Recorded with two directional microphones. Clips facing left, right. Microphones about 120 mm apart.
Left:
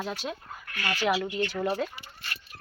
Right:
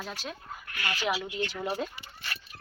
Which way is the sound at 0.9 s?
5° right (ahead or behind).